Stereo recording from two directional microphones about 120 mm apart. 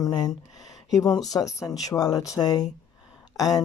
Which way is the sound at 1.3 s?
25° left (ahead or behind).